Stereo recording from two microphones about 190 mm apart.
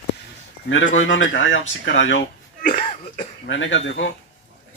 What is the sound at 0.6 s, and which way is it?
Speech, 90° left.